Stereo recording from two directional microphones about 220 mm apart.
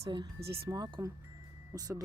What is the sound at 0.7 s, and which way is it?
Speech, 15° right (ahead or behind).